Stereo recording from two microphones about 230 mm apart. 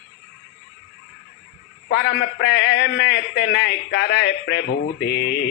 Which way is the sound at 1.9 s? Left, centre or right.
Left.